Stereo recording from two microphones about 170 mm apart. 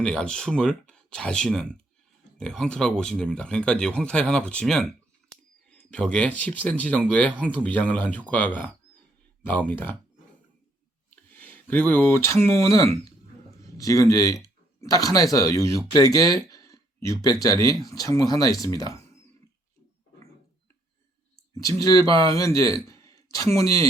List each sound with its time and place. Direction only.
0.0 s speech: 5° left (ahead or behind)
11.3 s speech: 10° left (ahead or behind)
21.5 s speech: 20° left (ahead or behind)
22.0 s speech: 30° right (ahead or behind)
22.3 s speech: 20° left (ahead or behind)